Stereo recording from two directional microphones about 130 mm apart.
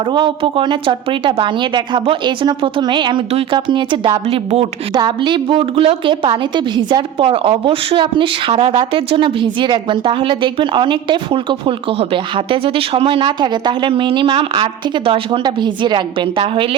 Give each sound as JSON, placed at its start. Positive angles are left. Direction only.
{"t": 0.0, "sound": "a woman's voice", "side_deg": -35}